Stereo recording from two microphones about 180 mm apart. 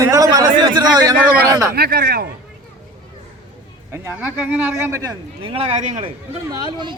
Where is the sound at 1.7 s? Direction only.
60° right (ahead or behind).